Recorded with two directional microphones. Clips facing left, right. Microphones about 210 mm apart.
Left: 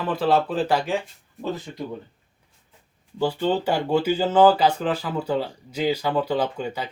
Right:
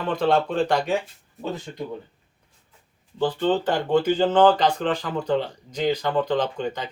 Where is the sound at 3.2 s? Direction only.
10° left (ahead or behind).